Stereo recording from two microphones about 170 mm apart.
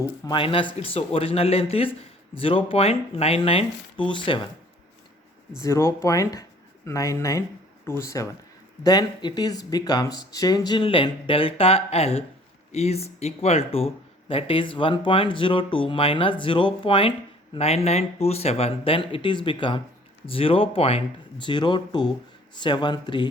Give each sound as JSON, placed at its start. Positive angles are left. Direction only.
{"t": 0.3, "sound": "speech", "side_deg": 30}
{"t": 5.5, "sound": "speech", "side_deg": 15}